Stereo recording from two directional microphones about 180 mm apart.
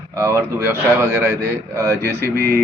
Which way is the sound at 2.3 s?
55° right (ahead or behind).